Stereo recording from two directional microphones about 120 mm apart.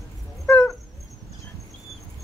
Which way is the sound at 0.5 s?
15° left (ahead or behind).